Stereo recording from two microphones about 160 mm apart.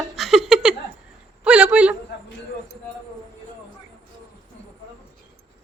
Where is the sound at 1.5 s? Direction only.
5° right (ahead or behind).